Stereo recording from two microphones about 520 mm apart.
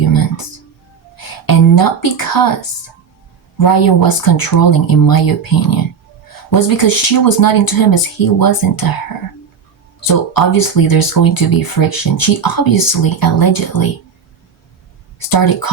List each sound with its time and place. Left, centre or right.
0.0 s music: left
1.1 s a sound: left
3.6 s speech: left
10.0 s speech: left
15.3 s speech: left